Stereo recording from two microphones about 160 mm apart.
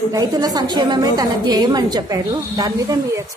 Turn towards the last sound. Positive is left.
turn(degrees=-20)  # may be behind; listen again after turning